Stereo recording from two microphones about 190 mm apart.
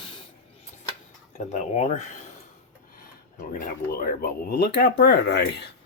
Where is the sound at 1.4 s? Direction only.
40° left (ahead or behind).